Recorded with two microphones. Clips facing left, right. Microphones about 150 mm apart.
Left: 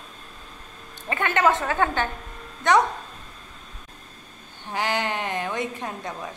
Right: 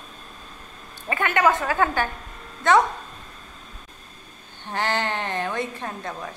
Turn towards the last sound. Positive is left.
turn(degrees=15)  # may be behind; listen again after turning